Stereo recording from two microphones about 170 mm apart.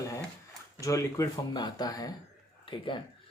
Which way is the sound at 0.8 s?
20° left (ahead or behind).